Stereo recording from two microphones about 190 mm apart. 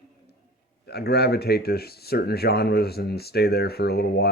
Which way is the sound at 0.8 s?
60° left (ahead or behind).